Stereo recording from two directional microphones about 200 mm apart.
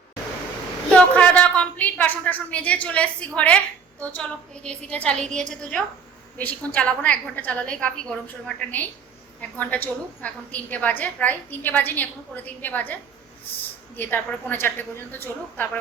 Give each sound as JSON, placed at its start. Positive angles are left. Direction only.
{"t": 0.9, "sound": "a woman's voice", "side_deg": 5}